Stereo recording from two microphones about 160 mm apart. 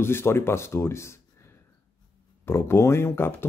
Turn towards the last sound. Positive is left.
turn(degrees=15)  # may be behind; listen again after turning